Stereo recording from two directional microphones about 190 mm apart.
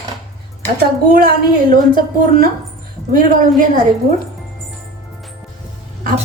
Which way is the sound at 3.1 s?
45° right (ahead or behind).